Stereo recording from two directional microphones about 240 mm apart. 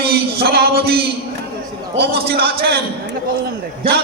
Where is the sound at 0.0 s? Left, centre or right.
Right.